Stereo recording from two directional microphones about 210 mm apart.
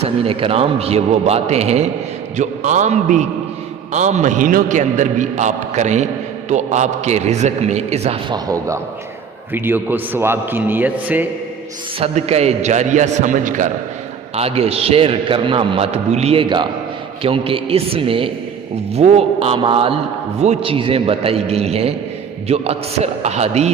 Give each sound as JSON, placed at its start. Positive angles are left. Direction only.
{"t": 0.0, "sound": "a man's voice", "side_deg": -25}
{"t": 8.4, "sound": "a man's voice", "side_deg": -15}
{"t": 11.9, "sound": "a man's voice", "side_deg": -30}